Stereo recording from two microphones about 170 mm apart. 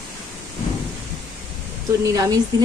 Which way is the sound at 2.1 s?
20° right (ahead or behind).